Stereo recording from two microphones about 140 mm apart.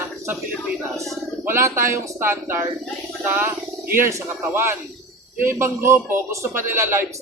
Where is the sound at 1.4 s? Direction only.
20° right (ahead or behind).